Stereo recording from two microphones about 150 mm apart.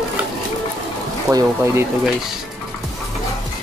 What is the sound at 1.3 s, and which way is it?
Speech, 20° right (ahead or behind).